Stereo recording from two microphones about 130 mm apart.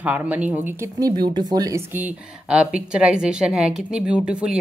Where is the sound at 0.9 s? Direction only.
30° right (ahead or behind).